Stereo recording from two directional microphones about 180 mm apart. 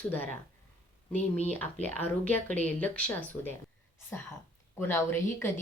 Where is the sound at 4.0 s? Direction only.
15° left (ahead or behind).